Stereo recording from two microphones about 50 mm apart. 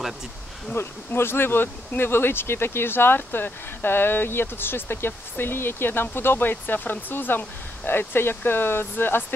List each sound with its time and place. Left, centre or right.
0.7 s speech: left
6.5 s speech: left